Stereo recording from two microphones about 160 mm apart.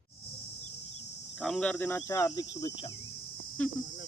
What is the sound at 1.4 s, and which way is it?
Speech, 5° left (ahead or behind).